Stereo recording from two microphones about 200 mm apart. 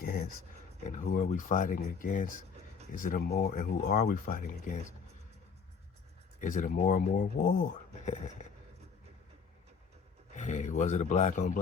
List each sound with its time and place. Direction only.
0.0 s dog: 50° left (ahead or behind)
0.9 s speech: 40° left (ahead or behind)
6.4 s speech: 40° left (ahead or behind)
8.4 s a sound: 40° left (ahead or behind)
10.3 s speech: 35° left (ahead or behind)